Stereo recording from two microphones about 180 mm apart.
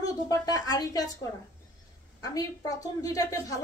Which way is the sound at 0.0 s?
20° left (ahead or behind).